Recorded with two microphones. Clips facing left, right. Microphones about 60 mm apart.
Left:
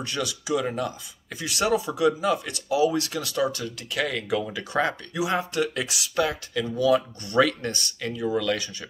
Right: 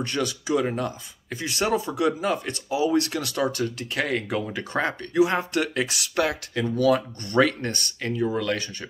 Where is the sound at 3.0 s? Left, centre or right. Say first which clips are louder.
Right 1 dB; right.